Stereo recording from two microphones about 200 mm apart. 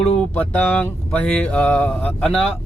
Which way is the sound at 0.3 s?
10° left (ahead or behind).